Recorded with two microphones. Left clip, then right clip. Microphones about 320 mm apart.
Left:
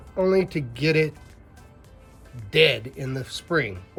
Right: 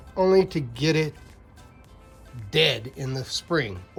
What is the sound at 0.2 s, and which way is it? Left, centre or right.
Speech, centre.